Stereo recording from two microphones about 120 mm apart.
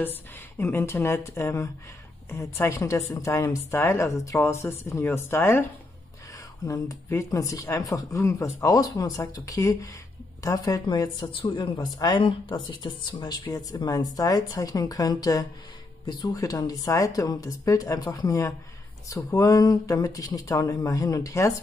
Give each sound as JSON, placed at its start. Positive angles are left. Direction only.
{"t": 0.6, "sound": "speech", "side_deg": 20}